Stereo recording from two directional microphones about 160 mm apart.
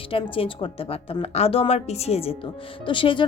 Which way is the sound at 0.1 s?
35° left (ahead or behind).